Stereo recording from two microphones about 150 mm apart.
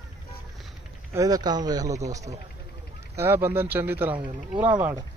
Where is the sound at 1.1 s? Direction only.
25° right (ahead or behind).